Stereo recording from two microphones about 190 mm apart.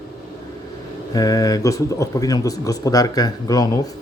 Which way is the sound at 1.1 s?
20° left (ahead or behind).